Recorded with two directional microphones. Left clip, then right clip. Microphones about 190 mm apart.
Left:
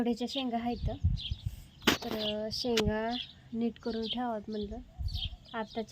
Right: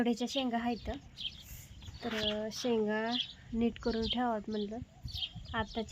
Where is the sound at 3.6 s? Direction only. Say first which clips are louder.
Right 1 dB; 25° right (ahead or behind).